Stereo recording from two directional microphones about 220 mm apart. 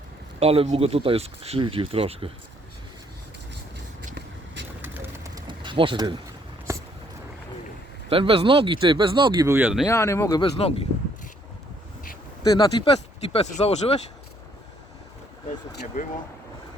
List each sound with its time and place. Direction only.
0.3 s speech: 25° right (ahead or behind)
4.8 s pigeon: 10° right (ahead or behind)
8.1 s speech: 25° right (ahead or behind)
9.5 s speech: 10° right (ahead or behind)
9.8 s speech: 10° left (ahead or behind)
10.6 s speech: 25° left (ahead or behind)
12.4 s speech: 15° left (ahead or behind)
13.3 s speech: 30° left (ahead or behind)